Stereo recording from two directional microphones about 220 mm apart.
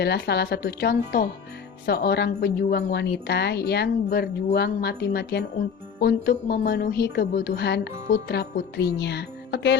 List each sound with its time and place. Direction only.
0.0 s a woman's voice: 50° left (ahead or behind)